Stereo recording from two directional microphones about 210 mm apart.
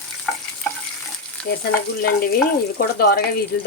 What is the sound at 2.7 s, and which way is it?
Speech, 50° left (ahead or behind).